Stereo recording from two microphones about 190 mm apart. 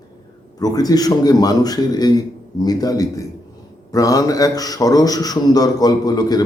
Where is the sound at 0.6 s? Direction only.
20° left (ahead or behind).